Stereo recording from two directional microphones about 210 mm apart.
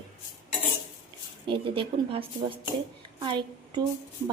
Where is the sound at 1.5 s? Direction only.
25° right (ahead or behind).